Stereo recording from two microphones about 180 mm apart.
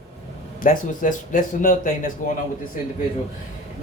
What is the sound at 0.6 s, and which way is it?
Speech, 45° left (ahead or behind).